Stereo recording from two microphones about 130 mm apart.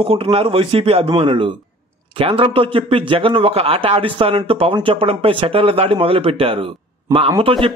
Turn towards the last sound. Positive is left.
turn(degrees=-45)  # may be behind; listen again after turning